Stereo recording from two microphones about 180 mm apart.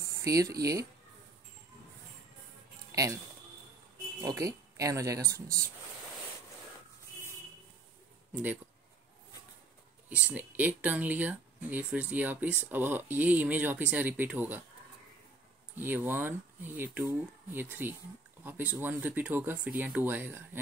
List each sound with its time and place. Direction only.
0.2 s speech: 20° right (ahead or behind)
2.9 s music: 20° right (ahead or behind)
4.2 s speech: 15° right (ahead or behind)
10.0 s speech: 10° right (ahead or behind)
15.7 s speech: 10° right (ahead or behind)